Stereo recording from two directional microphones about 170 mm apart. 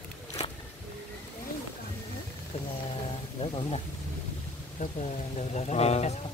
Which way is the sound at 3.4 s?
35° left (ahead or behind).